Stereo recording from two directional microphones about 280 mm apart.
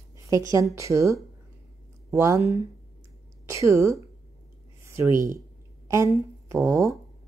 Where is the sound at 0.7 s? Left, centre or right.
Centre.